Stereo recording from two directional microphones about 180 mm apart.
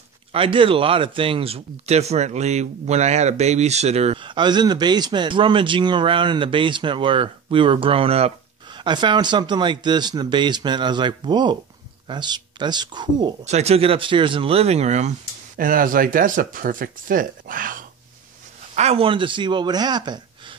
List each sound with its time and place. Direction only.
0.3 s speech: 30° right (ahead or behind)
13.4 s speech: 40° right (ahead or behind)
18.8 s speech: 35° right (ahead or behind)